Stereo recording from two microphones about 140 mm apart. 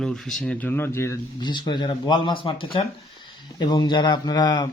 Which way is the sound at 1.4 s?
30° left (ahead or behind).